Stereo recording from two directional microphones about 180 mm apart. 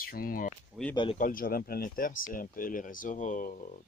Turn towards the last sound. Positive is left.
turn(degrees=45)  # may be behind; listen again after turning